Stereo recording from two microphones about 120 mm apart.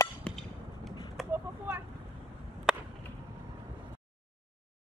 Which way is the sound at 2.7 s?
5° right (ahead or behind).